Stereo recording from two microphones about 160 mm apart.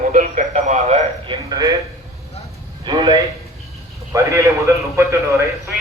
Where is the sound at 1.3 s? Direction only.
25° right (ahead or behind).